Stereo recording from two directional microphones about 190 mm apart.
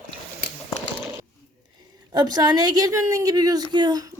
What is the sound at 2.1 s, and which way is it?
A woman's voice, 20° right (ahead or behind).